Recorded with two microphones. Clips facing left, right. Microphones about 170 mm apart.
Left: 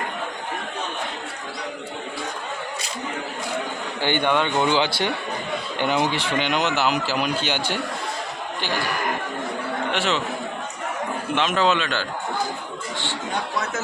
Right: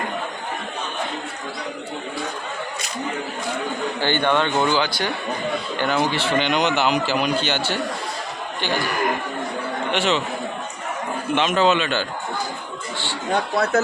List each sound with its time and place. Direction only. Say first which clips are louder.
4.0 s a man's voice: right 1 dB; 15° left (ahead or behind)
4.6 s a man's voice: even; 25° left (ahead or behind)
9.9 s a man's voice: right 4 dB; centre (ahead or behind)
11.3 s a man's voice: right 3 dB; centre (ahead or behind)